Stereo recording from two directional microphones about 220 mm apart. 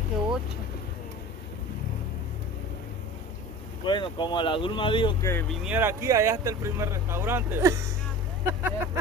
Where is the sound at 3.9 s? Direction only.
20° left (ahead or behind).